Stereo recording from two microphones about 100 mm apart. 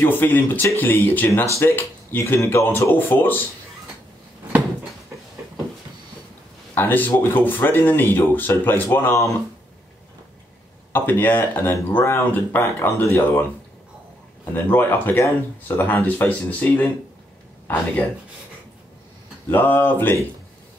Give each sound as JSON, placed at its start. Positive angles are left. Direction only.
{"t": 0.0, "sound": "speech", "side_deg": 20}
{"t": 6.7, "sound": "speech", "side_deg": 20}
{"t": 10.9, "sound": "speech", "side_deg": 20}
{"t": 14.5, "sound": "speech", "side_deg": 20}
{"t": 19.5, "sound": "speech", "side_deg": 20}